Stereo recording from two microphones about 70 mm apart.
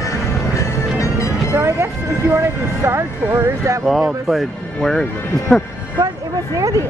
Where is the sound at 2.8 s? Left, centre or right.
Right.